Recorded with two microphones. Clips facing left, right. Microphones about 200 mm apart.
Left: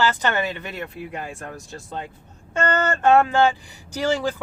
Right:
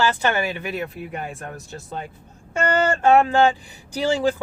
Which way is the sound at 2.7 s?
10° right (ahead or behind).